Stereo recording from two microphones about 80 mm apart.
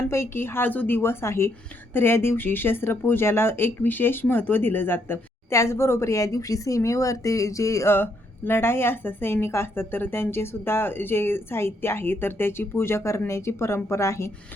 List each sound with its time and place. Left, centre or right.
0.1 s a woman's voice: left
7.9 s a woman's voice: left